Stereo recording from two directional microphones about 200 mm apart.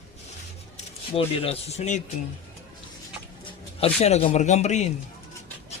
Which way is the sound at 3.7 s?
30° left (ahead or behind).